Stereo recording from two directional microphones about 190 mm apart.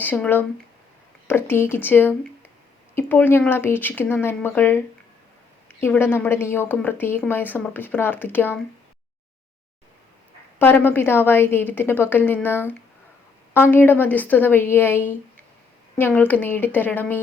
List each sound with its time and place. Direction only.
0.0 s a woman's voice: 10° left (ahead or behind)
10.6 s a woman's voice: 10° left (ahead or behind)